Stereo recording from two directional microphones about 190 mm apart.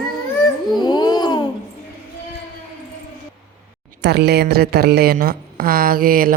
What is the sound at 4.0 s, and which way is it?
Speech, 60° right (ahead or behind).